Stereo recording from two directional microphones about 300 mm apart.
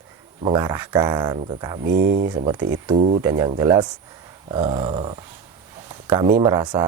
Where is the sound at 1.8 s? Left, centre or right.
Right.